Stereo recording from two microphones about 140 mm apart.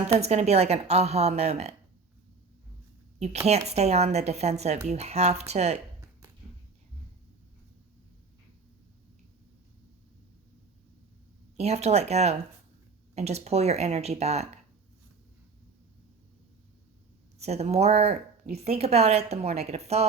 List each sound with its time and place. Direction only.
0.2 s speech: 50° right (ahead or behind)
3.4 s speech: 50° right (ahead or behind)
11.5 s speech: 50° right (ahead or behind)
17.3 s speech: 50° right (ahead or behind)